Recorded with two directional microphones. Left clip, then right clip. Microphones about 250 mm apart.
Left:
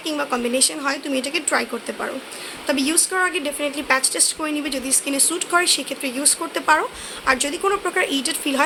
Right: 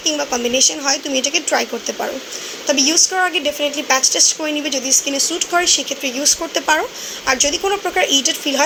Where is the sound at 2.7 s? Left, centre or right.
Left.